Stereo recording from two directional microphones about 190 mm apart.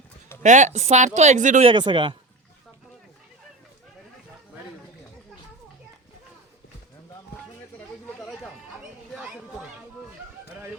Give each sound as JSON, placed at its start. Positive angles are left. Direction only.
{"t": 0.4, "sound": "speech", "side_deg": -40}
{"t": 1.7, "sound": "a man's voice", "side_deg": -25}
{"t": 8.2, "sound": "a sound", "side_deg": 0}
{"t": 9.1, "sound": "chatter", "side_deg": -5}